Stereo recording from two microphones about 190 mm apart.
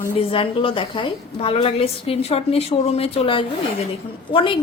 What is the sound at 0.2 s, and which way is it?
A woman's voice, 30° left (ahead or behind).